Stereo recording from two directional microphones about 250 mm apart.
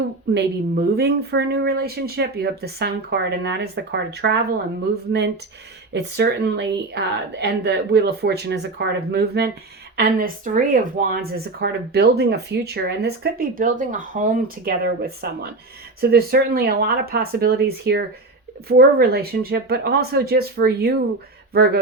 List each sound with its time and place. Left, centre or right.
0.3 s speech: right
5.9 s speech: right